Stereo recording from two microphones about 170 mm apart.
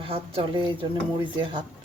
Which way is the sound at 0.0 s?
35° right (ahead or behind).